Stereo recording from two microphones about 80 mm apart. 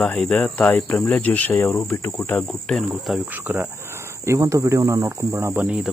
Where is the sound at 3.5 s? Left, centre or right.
Right.